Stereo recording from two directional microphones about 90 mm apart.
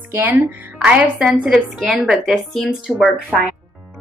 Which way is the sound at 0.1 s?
15° right (ahead or behind).